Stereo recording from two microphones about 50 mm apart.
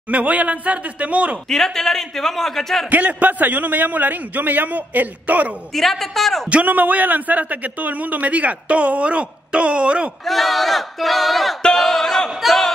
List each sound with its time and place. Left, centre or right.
0.1 s a man's voice: right
1.5 s a man's voice: centre
2.9 s a man's voice: right
5.8 s battle cry: centre
6.5 s a man's voice: right
10.2 s battle cry: centre